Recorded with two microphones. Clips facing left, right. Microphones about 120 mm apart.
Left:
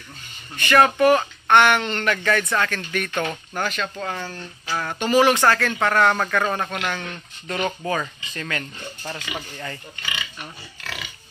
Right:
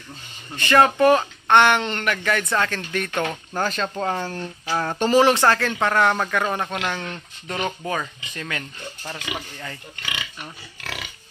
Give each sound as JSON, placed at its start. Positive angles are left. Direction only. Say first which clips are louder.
{"t": 0.6, "sound": "speech", "louder": "even", "side_deg": -20}
{"t": 2.0, "sound": "speech", "louder": "left 3 dB", "side_deg": -10}
{"t": 2.5, "sound": "speech", "louder": "even", "side_deg": -25}
{"t": 3.6, "sound": "speech", "louder": "right 3 dB", "side_deg": -30}
{"t": 4.6, "sound": "a sound", "louder": "right 3 dB", "side_deg": -25}
{"t": 4.9, "sound": "speech", "louder": "right 1 dB", "side_deg": -30}